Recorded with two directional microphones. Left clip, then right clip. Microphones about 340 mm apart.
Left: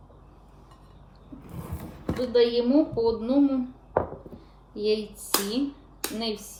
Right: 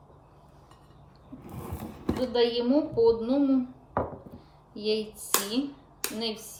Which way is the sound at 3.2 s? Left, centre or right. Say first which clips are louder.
Left 2 dB; centre.